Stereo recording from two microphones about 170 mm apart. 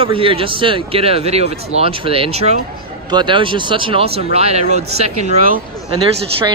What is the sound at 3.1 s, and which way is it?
Speech, 25° right (ahead or behind).